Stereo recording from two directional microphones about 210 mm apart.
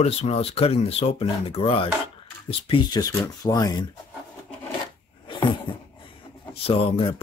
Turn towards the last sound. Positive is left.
turn(degrees=25)  # may be behind; listen again after turning